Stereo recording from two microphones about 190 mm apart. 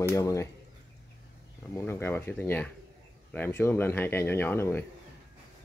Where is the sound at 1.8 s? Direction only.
15° left (ahead or behind).